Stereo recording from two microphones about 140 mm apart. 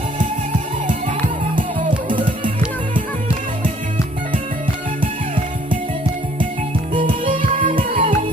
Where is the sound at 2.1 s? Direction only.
35° right (ahead or behind).